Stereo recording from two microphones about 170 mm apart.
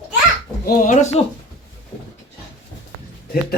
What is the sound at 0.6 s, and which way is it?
Speech, 55° left (ahead or behind).